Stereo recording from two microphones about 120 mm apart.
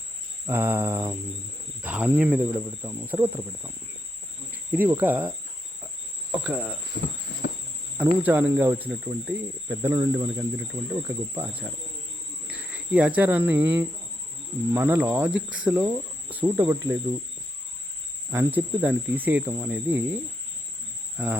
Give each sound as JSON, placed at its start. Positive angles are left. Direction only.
{"t": 0.4, "sound": "cricket", "side_deg": -15}
{"t": 2.5, "sound": "speech", "side_deg": -25}
{"t": 4.9, "sound": "cricket", "side_deg": -15}
{"t": 6.3, "sound": "cricket", "side_deg": -10}
{"t": 8.0, "sound": "cricket", "side_deg": -15}
{"t": 12.5, "sound": "speech", "side_deg": -10}
{"t": 14.7, "sound": "cricket", "side_deg": -15}
{"t": 18.3, "sound": "cricket", "side_deg": -15}
{"t": 21.2, "sound": "cricket", "side_deg": -10}